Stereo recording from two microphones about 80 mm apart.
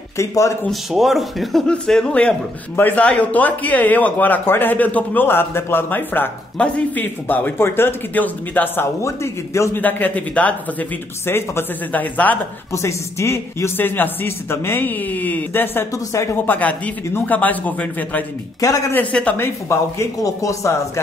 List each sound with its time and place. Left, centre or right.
0.2 s speech: left
0.7 s speech: centre
1.7 s a man's voice: centre
2.7 s speech: left
9.0 s speech: left
9.8 s speech: left
11.2 s speech: left
12.7 s speech: left
15.9 s a woman's voice: left
16.3 s speech: left
19.3 s speech: left